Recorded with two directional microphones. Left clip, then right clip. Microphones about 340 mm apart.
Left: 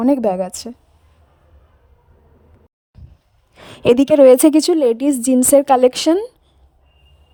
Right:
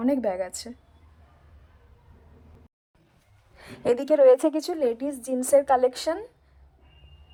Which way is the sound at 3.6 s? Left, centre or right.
Left.